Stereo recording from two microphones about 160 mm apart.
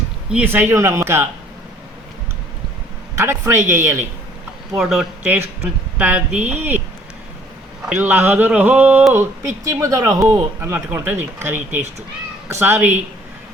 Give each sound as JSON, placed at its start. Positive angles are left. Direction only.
{"t": 0.3, "sound": "speech", "side_deg": -10}
{"t": 3.2, "sound": "speech", "side_deg": -15}
{"t": 4.8, "sound": "speech", "side_deg": -5}
{"t": 7.9, "sound": "speech", "side_deg": -10}